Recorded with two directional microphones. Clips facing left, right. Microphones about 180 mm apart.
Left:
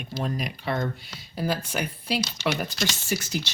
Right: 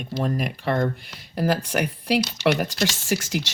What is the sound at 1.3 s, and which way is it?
Speech, 80° right.